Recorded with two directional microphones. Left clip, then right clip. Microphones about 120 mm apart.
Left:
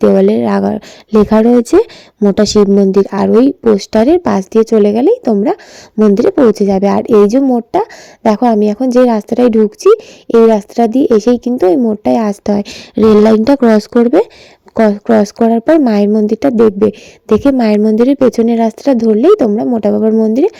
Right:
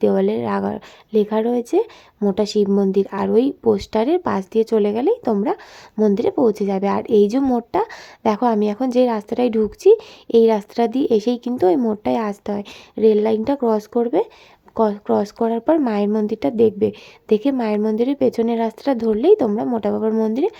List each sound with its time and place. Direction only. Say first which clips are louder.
0.0 s a woman's voice: left 9 dB; 45° left (ahead or behind)
1.1 s a woman's voice: left 10 dB; 65° left (ahead or behind)
2.8 s a woman's voice: left 9 dB; 45° left (ahead or behind)
17.6 s a woman's voice: left 9 dB; 60° left (ahead or behind); by 20.5 s 40° left (ahead or behind)